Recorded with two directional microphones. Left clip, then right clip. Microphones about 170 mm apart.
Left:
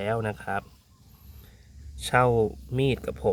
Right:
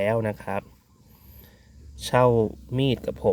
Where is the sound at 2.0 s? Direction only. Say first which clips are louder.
Right 2 dB; 15° right (ahead or behind).